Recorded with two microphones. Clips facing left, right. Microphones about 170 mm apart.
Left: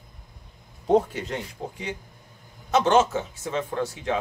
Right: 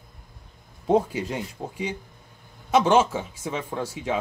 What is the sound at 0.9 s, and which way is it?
Speech, 10° right (ahead or behind).